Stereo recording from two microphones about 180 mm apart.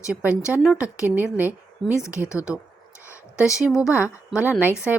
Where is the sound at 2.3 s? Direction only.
15° left (ahead or behind).